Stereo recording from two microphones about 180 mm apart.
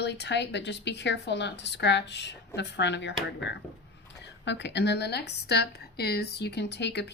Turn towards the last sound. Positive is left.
turn(degrees=70)  # may be behind; listen again after turning